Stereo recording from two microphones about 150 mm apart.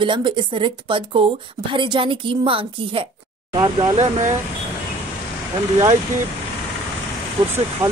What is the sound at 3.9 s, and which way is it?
Speech, 50° right (ahead or behind).